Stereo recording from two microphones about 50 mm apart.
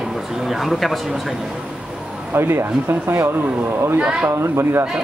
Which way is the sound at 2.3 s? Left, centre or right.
Right.